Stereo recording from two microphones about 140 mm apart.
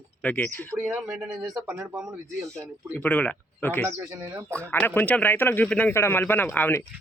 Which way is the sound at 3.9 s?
15° right (ahead or behind).